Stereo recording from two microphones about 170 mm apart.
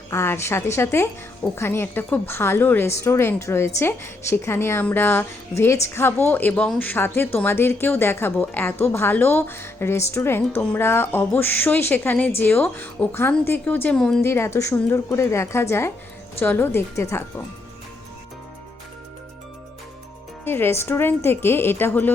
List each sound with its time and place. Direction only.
0.1 s speech: 15° left (ahead or behind)
14.3 s speech: 15° left (ahead or behind)
20.4 s speech: 15° left (ahead or behind)